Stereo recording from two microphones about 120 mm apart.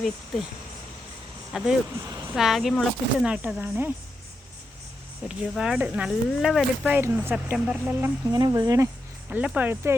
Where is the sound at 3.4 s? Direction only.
15° right (ahead or behind).